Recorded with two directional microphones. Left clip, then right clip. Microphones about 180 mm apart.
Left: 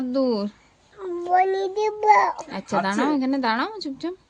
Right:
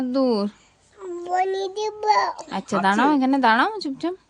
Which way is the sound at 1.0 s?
15° left (ahead or behind).